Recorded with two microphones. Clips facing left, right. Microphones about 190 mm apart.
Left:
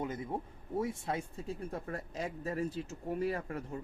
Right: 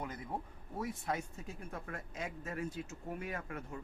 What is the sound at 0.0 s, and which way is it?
Speech, 25° left (ahead or behind).